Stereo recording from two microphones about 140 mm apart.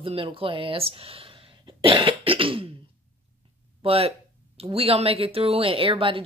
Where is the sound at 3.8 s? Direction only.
45° right (ahead or behind).